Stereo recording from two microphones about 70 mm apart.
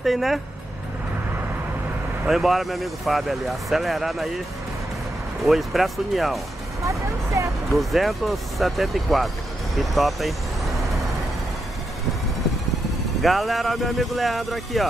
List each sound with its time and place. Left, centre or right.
0.0 s speech: centre
2.2 s speech: centre
5.4 s speech: centre
7.4 s speech: right
7.7 s speech: centre
13.2 s speech: centre